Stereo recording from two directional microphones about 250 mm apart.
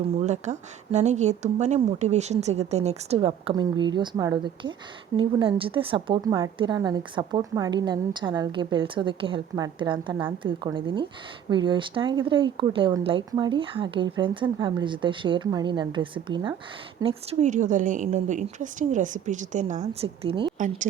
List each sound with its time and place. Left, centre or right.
0.2 s speech: right